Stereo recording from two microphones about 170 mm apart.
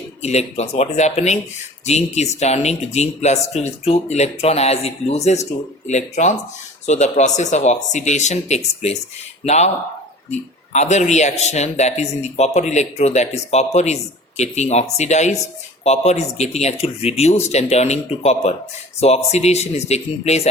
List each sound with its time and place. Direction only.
0.2 s a man's voice: 40° left (ahead or behind)